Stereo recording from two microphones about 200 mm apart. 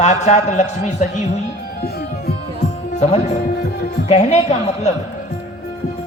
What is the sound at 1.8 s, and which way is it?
Music, 50° left (ahead or behind).